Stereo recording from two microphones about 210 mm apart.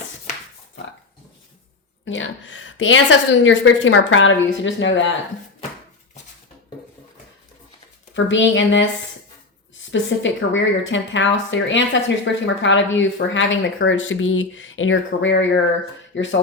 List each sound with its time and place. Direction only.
2.0 s a woman's voice: 65° left (ahead or behind)
8.1 s a woman's voice: 60° left (ahead or behind)